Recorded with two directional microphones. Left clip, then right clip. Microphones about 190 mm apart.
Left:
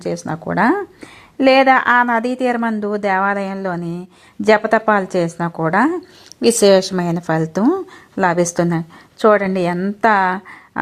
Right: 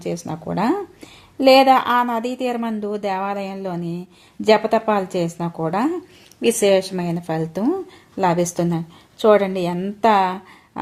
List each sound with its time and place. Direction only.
0.0 s a woman's voice: 25° left (ahead or behind)